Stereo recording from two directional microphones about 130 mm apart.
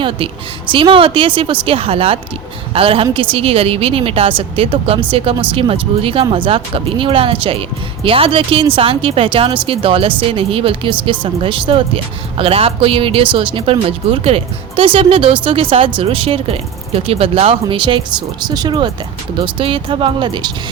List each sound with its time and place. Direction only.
0.7 s speech: 40° right (ahead or behind)